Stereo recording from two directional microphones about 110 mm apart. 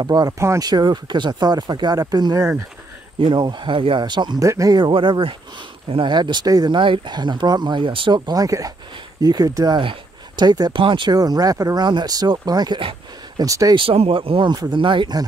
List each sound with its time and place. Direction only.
0.0 s speech: 35° right (ahead or behind)
0.3 s speech: 25° right (ahead or behind)
0.7 s speech: 40° right (ahead or behind)
4.5 s speech: 30° right (ahead or behind)
9.8 s speech: 45° right (ahead or behind)
13.7 s speech: 60° right (ahead or behind)
14.5 s speech: 45° right (ahead or behind)